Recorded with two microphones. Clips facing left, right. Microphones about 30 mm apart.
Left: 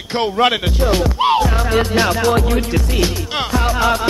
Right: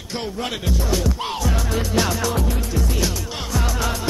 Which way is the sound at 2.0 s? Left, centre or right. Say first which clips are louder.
Left 5 dB; left.